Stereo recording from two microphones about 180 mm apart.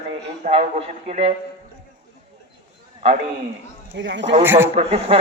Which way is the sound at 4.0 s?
85° right.